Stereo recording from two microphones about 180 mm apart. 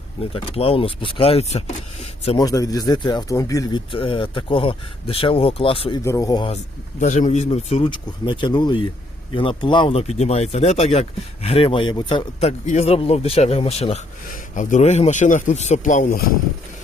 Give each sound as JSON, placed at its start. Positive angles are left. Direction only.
{"t": 0.3, "sound": "speech", "side_deg": 30}
{"t": 2.4, "sound": "speech", "side_deg": 20}
{"t": 6.1, "sound": "speech", "side_deg": 20}
{"t": 7.0, "sound": "a man's voice", "side_deg": 40}